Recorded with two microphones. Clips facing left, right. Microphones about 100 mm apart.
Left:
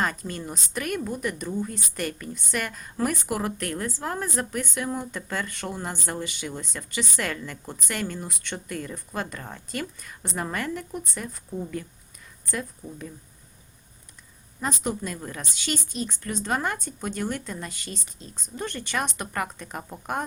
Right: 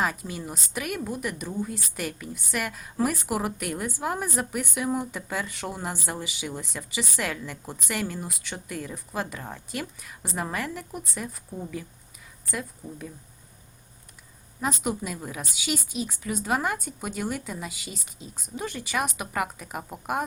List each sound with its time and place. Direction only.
0.0 s a woman's voice: 5° right (ahead or behind)
14.6 s speech: 5° right (ahead or behind)